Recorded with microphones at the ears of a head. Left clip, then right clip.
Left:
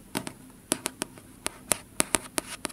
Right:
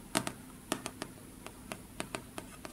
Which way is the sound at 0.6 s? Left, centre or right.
Left.